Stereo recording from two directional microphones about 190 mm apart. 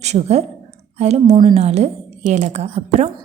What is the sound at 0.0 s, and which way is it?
A woman's voice, 35° right (ahead or behind).